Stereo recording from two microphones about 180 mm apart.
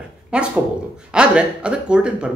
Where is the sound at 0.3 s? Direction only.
5° right (ahead or behind).